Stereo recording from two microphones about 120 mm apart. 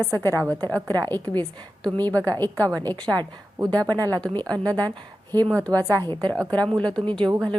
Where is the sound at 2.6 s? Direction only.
30° right (ahead or behind).